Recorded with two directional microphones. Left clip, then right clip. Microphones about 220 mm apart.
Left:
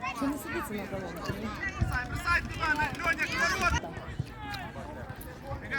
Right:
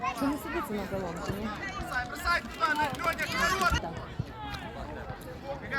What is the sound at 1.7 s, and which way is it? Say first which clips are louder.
Speech: right 1 dB; 45° right (ahead or behind).